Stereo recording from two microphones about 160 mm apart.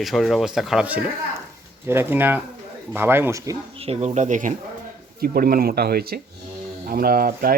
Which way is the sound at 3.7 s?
40° right (ahead or behind).